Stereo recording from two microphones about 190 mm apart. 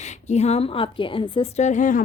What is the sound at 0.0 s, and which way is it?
A woman's voice, 35° left (ahead or behind).